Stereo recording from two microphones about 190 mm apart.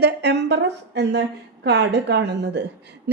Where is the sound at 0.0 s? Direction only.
60° right (ahead or behind).